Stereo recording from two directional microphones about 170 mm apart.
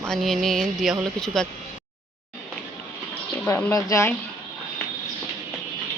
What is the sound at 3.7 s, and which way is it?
Speech, 15° left (ahead or behind).